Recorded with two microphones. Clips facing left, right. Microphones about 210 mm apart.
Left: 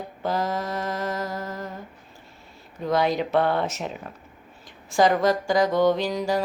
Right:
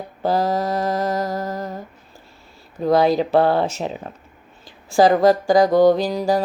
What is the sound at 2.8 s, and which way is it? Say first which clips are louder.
Speech: right 6 dB; 35° right (ahead or behind).